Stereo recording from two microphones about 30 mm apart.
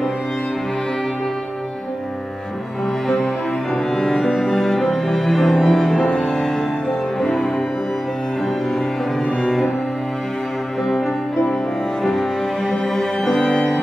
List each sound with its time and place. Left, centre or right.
4.4 s music: centre
12.0 s music: centre